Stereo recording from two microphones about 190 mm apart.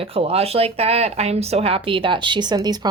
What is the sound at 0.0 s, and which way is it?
Speech, 30° right (ahead or behind).